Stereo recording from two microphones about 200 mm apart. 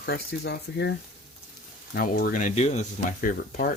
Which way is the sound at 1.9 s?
45° left (ahead or behind).